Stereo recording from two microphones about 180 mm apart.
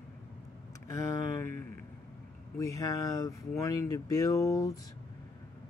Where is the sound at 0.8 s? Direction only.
20° left (ahead or behind).